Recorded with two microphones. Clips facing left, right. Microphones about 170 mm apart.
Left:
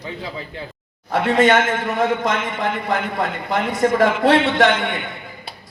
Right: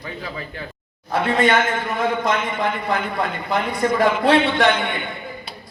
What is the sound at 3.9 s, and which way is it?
Speech, 90° left.